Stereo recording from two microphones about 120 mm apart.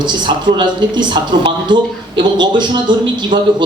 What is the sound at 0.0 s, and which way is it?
A man's voice, 40° right (ahead or behind).